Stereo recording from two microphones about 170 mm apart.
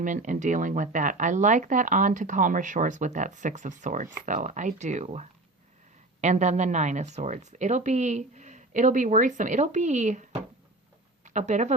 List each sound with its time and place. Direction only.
0.0 s speech: 50° right (ahead or behind)
11.3 s speech: 45° right (ahead or behind)